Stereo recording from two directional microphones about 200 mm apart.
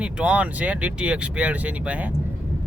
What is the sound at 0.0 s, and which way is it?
Speech, 5° right (ahead or behind).